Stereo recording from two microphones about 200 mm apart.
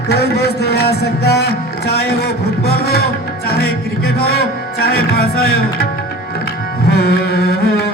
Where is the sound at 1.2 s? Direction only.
55° left (ahead or behind).